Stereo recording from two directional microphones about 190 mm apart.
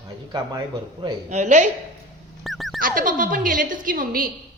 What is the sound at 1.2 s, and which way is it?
Speech, 40° right (ahead or behind).